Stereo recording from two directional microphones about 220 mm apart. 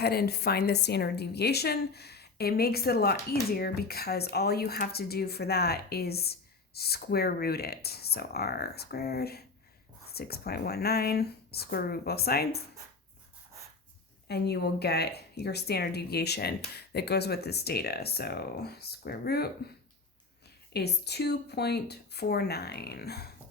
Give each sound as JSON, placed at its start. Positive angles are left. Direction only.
{"t": 0.0, "sound": "speech", "side_deg": 45}
{"t": 14.3, "sound": "speech", "side_deg": 50}
{"t": 20.7, "sound": "speech", "side_deg": 50}